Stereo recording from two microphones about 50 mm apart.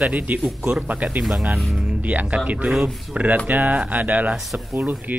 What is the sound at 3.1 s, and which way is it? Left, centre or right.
Speech, right.